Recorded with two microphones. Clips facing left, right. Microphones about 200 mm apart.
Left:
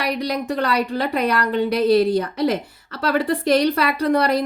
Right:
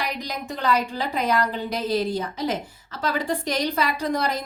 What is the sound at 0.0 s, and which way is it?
A woman's voice, 65° left (ahead or behind).